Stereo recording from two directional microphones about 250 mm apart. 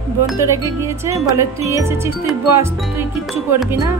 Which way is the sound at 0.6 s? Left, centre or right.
Centre.